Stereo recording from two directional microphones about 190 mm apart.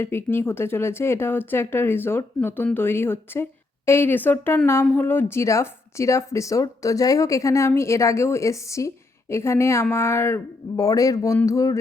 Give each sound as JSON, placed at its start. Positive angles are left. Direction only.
{"t": 0.0, "sound": "a woman's voice", "side_deg": 10}